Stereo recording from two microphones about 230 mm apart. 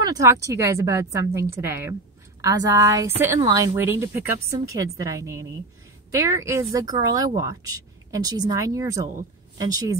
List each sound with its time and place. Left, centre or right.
0.0 s a woman's voice: centre